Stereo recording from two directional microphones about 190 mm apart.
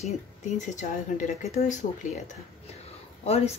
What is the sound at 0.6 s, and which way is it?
Speech, 40° left (ahead or behind).